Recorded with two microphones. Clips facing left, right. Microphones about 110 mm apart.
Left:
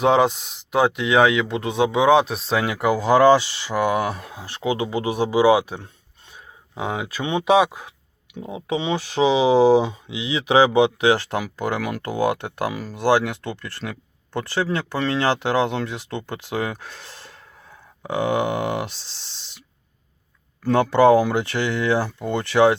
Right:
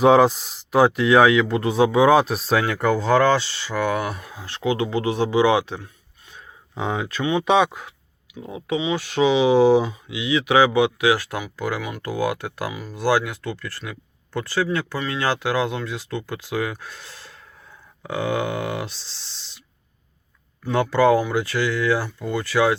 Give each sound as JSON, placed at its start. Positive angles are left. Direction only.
{"t": 0.0, "sound": "speech", "side_deg": -5}
{"t": 2.6, "sound": "speech", "side_deg": 10}
{"t": 4.1, "sound": "speech", "side_deg": 30}
{"t": 7.2, "sound": "speech", "side_deg": 25}
{"t": 7.4, "sound": "speech", "side_deg": 10}
{"t": 16.9, "sound": "speech", "side_deg": 50}
{"t": 18.0, "sound": "speech", "side_deg": 20}
{"t": 20.9, "sound": "speech", "side_deg": 20}